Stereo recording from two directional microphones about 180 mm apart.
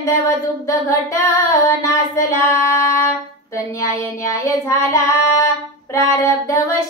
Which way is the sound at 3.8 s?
15° left (ahead or behind).